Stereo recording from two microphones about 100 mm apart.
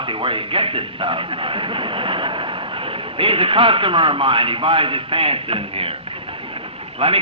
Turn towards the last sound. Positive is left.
turn(degrees=-70)  # may be behind; listen again after turning